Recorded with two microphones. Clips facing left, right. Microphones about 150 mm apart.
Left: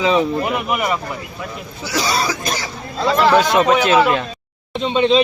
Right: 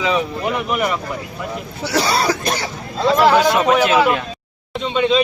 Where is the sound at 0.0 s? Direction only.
30° left (ahead or behind).